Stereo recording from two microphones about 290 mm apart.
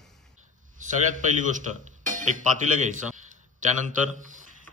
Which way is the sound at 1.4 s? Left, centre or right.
Right.